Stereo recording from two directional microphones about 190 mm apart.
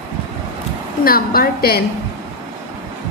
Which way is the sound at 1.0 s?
50° left (ahead or behind).